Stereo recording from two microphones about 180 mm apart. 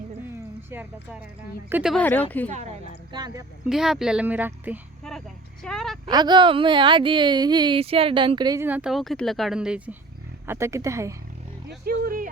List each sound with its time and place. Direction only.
0.7 s speech: 10° right (ahead or behind)
2.0 s speech: 10° left (ahead or behind)
2.5 s a woman's voice: 40° right (ahead or behind)
3.1 s speech: 25° right (ahead or behind)
3.6 s speech: 5° right (ahead or behind)
5.6 s speech: centre (ahead or behind)
6.1 s speech: 25° right (ahead or behind)
8.6 s speech: 5° right (ahead or behind)
11.9 s a sound: 50° right (ahead or behind)